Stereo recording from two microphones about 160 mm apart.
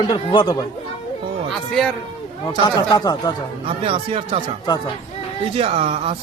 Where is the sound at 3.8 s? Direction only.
35° right (ahead or behind).